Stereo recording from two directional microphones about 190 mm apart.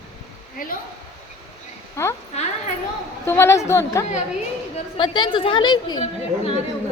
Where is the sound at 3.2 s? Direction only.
15° left (ahead or behind).